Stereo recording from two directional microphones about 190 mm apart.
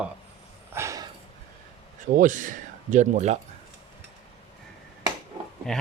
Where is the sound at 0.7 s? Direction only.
15° right (ahead or behind).